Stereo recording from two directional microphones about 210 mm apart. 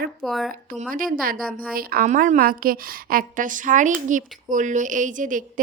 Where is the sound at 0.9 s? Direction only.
45° right (ahead or behind).